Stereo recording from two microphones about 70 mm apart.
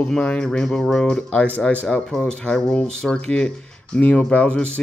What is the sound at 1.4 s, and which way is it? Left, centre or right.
Speech, centre.